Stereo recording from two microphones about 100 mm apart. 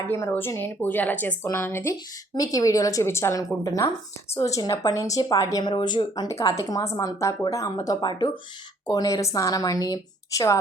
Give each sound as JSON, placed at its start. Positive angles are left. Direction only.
{"t": 0.0, "sound": "speech", "side_deg": 25}
{"t": 2.3, "sound": "a woman's voice", "side_deg": 35}
{"t": 5.6, "sound": "speech", "side_deg": 50}
{"t": 6.2, "sound": "a woman's voice", "side_deg": 35}